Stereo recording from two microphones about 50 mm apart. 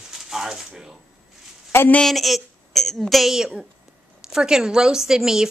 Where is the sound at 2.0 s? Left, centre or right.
Centre.